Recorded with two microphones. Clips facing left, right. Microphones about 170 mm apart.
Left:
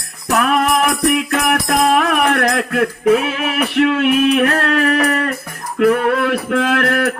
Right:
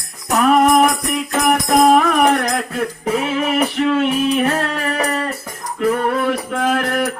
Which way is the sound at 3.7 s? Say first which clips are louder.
Left 3 dB; 75° left (ahead or behind).